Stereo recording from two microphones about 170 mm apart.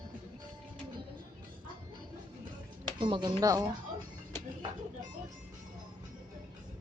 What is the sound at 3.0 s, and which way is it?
Speech, 30° right (ahead or behind).